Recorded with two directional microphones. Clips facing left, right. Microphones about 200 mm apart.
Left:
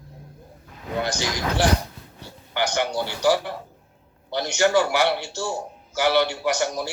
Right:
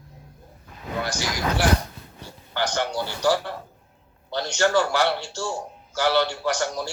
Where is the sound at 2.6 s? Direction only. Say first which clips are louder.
Left 2 dB; 15° left (ahead or behind).